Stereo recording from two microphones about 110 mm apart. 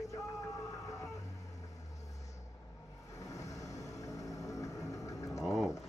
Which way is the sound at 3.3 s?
30° left (ahead or behind).